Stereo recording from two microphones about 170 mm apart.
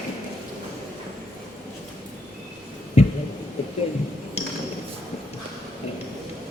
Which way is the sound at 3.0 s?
35° left (ahead or behind).